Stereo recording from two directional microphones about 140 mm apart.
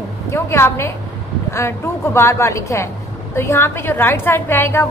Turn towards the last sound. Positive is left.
turn(degrees=15)  # may be behind; listen again after turning